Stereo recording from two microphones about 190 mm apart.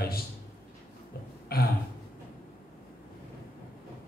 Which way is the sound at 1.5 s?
55° left (ahead or behind).